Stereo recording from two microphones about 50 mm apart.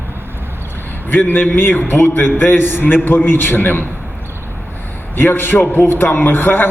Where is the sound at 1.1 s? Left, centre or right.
Left.